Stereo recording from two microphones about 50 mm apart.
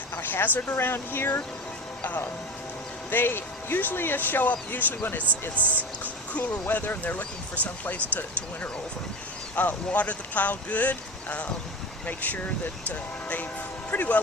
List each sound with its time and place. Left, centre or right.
0.2 s speech: left
2.0 s speech: left
3.1 s speech: left
5.2 s speech: right
6.3 s speech: left
9.6 s speech: left
13.9 s speech: left